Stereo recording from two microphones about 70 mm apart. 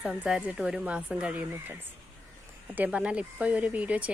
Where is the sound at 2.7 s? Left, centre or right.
Right.